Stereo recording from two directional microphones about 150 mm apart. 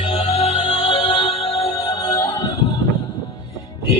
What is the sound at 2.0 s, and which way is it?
Music, 25° left (ahead or behind).